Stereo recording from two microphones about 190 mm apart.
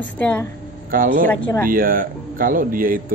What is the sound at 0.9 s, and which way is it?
Speech, 45° right (ahead or behind).